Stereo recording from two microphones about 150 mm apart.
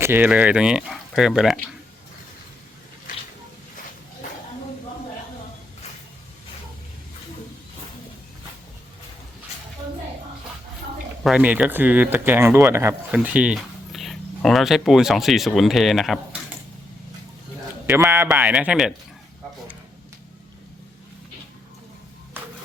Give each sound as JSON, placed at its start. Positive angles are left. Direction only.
{"t": 0.0, "sound": "speech", "side_deg": -15}
{"t": 11.2, "sound": "speech", "side_deg": -5}
{"t": 17.8, "sound": "speech", "side_deg": -10}